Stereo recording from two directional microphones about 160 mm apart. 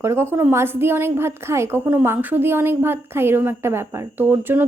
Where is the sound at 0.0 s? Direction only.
15° right (ahead or behind).